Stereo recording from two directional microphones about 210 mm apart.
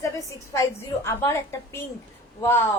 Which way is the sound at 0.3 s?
15° left (ahead or behind).